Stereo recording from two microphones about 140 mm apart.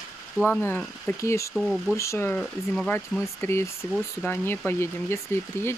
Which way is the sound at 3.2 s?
20° left (ahead or behind).